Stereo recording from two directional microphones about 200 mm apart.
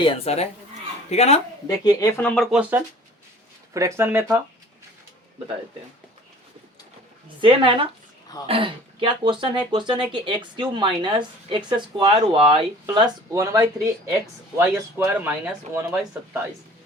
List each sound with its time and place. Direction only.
0.0 s speech: 30° left (ahead or behind)
1.6 s speech: 15° left (ahead or behind); by 4.4 s 10° right (ahead or behind)
7.4 s speech: 25° right (ahead or behind)